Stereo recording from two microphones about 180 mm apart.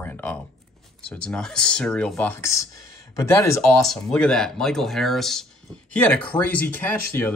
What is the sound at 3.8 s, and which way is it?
Speech, 5° left (ahead or behind).